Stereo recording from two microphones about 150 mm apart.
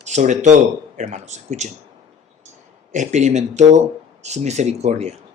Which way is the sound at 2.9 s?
50° right (ahead or behind).